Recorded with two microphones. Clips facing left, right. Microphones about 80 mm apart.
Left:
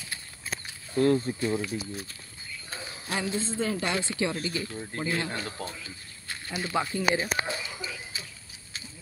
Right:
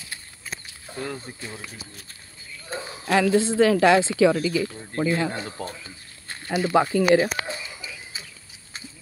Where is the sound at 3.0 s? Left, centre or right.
Right.